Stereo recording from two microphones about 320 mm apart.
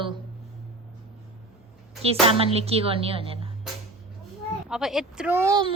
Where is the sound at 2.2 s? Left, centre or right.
Centre.